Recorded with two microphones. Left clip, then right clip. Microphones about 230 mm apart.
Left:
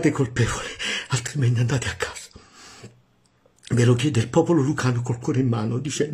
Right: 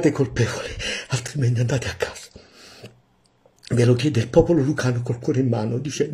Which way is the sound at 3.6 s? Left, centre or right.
Centre.